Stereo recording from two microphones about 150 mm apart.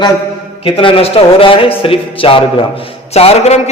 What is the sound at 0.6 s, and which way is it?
A man's voice, 35° left (ahead or behind).